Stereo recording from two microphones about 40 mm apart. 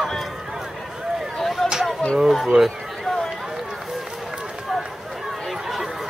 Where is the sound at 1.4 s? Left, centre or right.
Centre.